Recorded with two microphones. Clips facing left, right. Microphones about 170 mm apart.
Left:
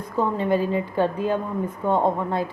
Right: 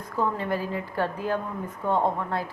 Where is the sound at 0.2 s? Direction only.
20° left (ahead or behind).